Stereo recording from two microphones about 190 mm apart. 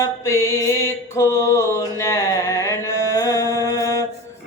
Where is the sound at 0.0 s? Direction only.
15° left (ahead or behind).